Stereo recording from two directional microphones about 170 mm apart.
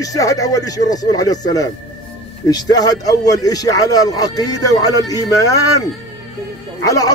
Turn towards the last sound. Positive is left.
turn(degrees=20)  # may be behind; listen again after turning